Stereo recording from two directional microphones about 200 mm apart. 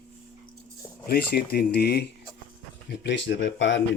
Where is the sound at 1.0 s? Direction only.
50° left (ahead or behind); by 3.8 s 65° left (ahead or behind).